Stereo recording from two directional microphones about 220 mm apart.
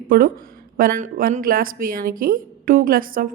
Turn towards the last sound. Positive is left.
turn(degrees=-40)  # may be behind; listen again after turning